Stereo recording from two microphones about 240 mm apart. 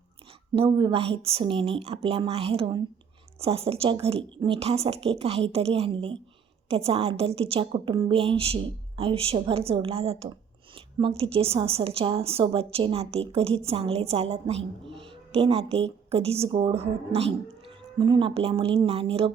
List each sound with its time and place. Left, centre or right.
0.5 s a woman's voice: right